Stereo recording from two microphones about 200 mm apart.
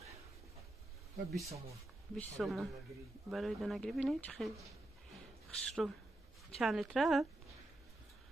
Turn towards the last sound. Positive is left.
turn(degrees=0)  # may be behind; listen again after turning